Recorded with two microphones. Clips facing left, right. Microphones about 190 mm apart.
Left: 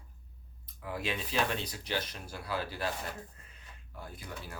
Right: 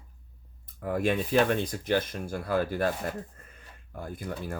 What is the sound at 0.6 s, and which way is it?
Speech, 50° right (ahead or behind).